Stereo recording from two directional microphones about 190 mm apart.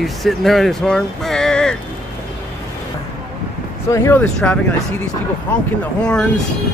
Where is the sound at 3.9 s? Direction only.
10° left (ahead or behind).